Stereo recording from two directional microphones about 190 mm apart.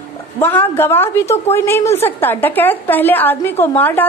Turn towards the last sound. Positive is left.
turn(degrees=10)  # may be behind; listen again after turning